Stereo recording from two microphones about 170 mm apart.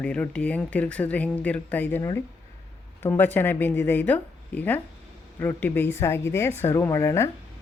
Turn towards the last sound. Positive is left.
turn(degrees=15)  # may be behind; listen again after turning